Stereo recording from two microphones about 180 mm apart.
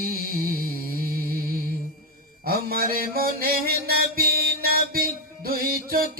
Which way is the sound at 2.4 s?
55° right (ahead or behind).